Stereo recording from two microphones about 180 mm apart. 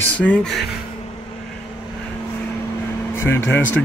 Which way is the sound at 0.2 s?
5° left (ahead or behind).